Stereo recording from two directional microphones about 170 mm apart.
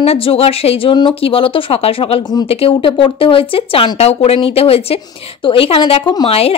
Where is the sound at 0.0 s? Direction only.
35° left (ahead or behind).